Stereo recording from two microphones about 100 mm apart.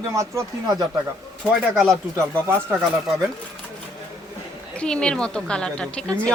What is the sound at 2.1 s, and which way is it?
Speech, 30° right (ahead or behind).